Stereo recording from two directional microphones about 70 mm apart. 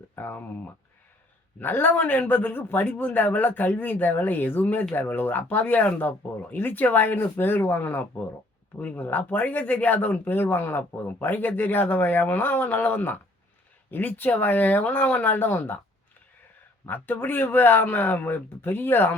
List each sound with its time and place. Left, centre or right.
0.2 s speech: left
16.8 s speech: left